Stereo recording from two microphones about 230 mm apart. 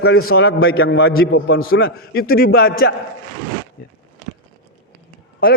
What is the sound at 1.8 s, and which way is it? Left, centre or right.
Speech, left.